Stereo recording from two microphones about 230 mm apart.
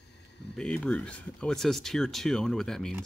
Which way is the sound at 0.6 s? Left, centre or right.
Centre.